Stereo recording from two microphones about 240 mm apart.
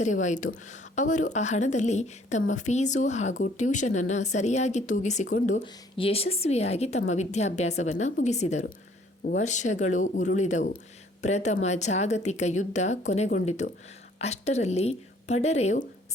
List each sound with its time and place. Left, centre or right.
0.0 s speech: left